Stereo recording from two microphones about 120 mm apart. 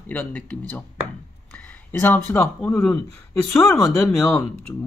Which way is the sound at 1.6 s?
15° left (ahead or behind).